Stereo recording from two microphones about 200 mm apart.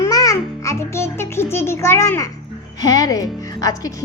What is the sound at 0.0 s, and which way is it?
Music, 15° left (ahead or behind).